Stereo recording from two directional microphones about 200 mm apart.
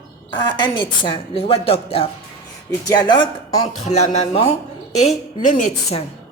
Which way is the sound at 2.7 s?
20° left (ahead or behind).